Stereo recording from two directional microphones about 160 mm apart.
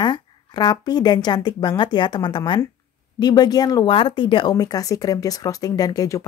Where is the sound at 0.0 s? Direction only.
30° left (ahead or behind).